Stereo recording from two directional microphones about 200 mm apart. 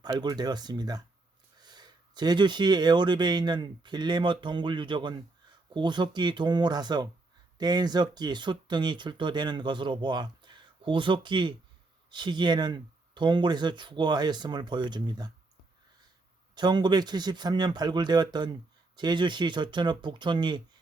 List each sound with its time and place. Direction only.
0.0 s speech: 20° right (ahead or behind)
16.6 s speech: 20° right (ahead or behind)